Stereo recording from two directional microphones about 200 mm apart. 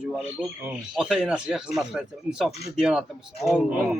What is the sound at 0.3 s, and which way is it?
A man's voice, 5° right (ahead or behind).